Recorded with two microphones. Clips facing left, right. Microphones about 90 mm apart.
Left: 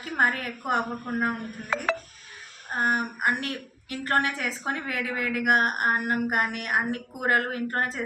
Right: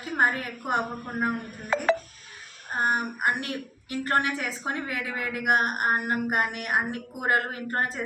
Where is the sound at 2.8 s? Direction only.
25° right (ahead or behind).